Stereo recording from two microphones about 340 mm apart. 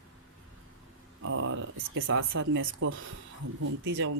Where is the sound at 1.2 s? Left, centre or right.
Right.